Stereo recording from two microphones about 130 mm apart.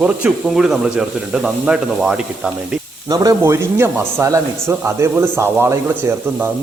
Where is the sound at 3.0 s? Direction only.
25° right (ahead or behind).